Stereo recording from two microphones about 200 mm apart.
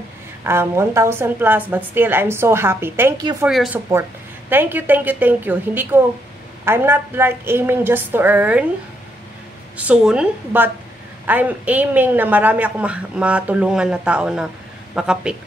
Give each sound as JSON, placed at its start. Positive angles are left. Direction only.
{"t": 0.4, "sound": "a woman's voice", "side_deg": -10}
{"t": 3.4, "sound": "a woman's voice", "side_deg": -5}
{"t": 9.8, "sound": "a woman's voice", "side_deg": -5}